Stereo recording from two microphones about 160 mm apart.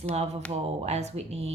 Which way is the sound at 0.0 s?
45° right (ahead or behind).